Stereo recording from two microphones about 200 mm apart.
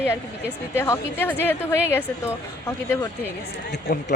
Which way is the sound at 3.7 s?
60° left (ahead or behind).